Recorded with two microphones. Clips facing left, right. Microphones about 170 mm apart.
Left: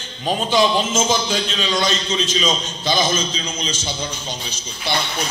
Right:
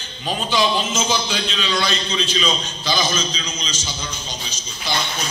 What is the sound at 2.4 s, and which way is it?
Speech, 25° left (ahead or behind).